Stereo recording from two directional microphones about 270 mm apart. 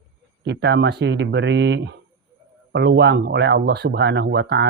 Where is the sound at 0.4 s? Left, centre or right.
Right.